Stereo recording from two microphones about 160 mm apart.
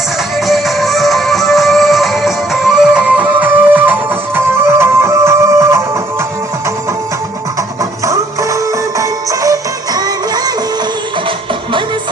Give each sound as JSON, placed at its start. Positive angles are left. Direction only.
{"t": 0.4, "sound": "music", "side_deg": 0}
{"t": 8.0, "sound": "music", "side_deg": -20}